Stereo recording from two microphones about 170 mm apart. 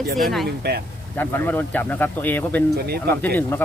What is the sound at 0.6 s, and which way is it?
Speech, 70° right (ahead or behind).